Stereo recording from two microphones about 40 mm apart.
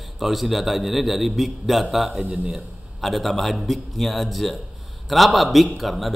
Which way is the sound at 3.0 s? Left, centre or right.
Centre.